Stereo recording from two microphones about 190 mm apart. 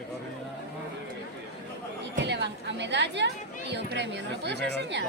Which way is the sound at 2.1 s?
65° right (ahead or behind).